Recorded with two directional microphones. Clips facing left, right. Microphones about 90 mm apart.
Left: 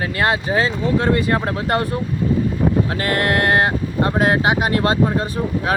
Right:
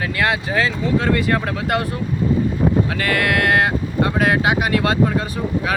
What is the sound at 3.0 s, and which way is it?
Speech, 35° left (ahead or behind).